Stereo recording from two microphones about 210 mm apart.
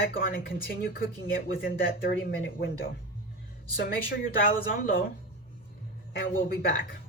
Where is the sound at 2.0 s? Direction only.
50° left (ahead or behind).